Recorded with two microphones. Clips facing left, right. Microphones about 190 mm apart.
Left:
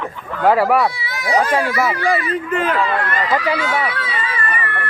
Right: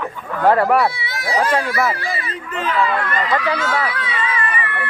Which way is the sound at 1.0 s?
30° right (ahead or behind).